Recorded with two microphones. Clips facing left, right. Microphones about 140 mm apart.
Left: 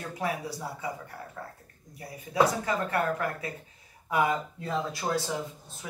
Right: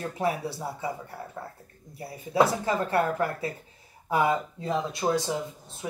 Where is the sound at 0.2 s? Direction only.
30° right (ahead or behind).